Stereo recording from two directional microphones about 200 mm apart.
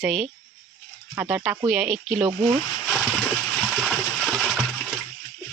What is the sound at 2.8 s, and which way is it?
Splash, centre (ahead or behind).